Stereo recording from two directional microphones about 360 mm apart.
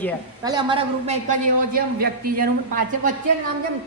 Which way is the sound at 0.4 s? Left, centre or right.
Centre.